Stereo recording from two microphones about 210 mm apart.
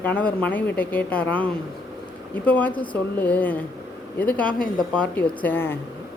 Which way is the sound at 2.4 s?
10° left (ahead or behind).